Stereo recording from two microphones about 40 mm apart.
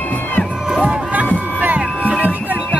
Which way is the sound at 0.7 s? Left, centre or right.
Right.